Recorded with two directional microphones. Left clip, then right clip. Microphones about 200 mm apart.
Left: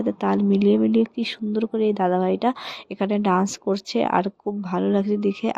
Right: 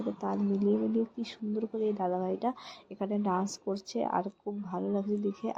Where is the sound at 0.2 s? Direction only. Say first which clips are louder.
Left 11 dB; 40° left (ahead or behind).